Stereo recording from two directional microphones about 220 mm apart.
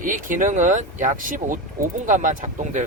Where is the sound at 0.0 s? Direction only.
35° right (ahead or behind).